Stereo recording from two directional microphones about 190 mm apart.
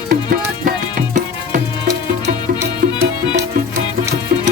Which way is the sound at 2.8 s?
50° right (ahead or behind).